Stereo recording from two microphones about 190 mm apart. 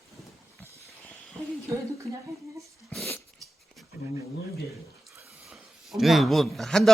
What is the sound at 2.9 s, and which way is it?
Dog, 5° left (ahead or behind).